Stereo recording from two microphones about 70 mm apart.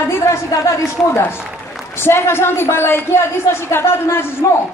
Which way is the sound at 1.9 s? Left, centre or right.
Left.